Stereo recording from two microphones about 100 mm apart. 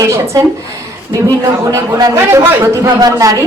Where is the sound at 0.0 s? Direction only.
30° right (ahead or behind).